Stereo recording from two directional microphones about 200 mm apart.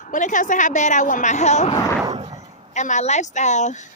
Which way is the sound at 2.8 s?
35° left (ahead or behind).